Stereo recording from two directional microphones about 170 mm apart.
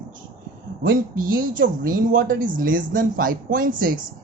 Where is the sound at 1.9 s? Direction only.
55° right (ahead or behind).